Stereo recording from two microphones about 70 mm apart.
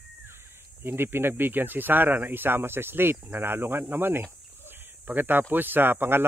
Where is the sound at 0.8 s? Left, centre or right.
Right.